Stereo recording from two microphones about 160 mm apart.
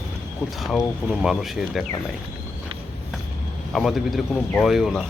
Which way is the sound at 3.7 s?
Centre (ahead or behind).